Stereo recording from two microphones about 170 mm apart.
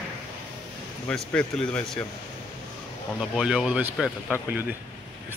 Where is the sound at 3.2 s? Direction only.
5° right (ahead or behind).